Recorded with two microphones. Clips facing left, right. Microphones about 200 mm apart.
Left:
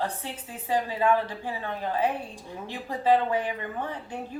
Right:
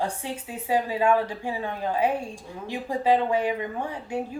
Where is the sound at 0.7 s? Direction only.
10° right (ahead or behind).